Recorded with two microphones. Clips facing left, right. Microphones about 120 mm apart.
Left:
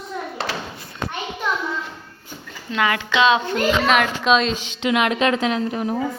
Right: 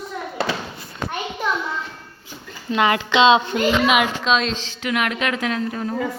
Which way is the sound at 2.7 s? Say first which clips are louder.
Right 2 dB; 25° right (ahead or behind).